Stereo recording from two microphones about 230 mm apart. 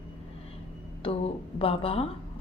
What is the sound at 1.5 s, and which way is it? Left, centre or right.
Speech, left.